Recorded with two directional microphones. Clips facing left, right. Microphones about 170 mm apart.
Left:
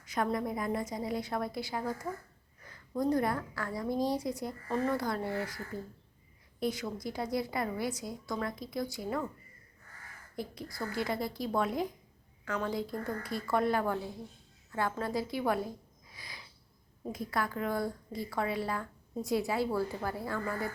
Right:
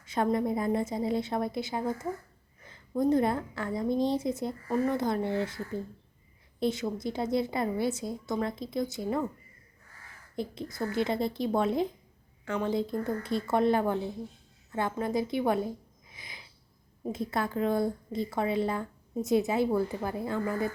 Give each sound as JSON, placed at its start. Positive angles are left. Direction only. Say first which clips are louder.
{"t": 0.0, "sound": "speech", "louder": "right 5 dB", "side_deg": -25}
{"t": 4.7, "sound": "speech", "louder": "right 3 dB", "side_deg": -10}
{"t": 4.9, "sound": "speech", "louder": "right 5 dB", "side_deg": -20}
{"t": 10.3, "sound": "speech", "louder": "right 5 dB", "side_deg": -25}